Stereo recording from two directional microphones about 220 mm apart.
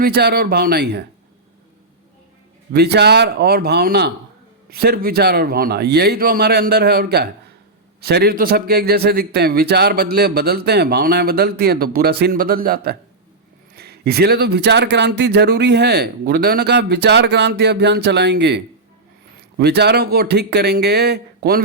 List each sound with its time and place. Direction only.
0.0 s a man's voice: 45° right (ahead or behind)
2.7 s a man's voice: 45° right (ahead or behind)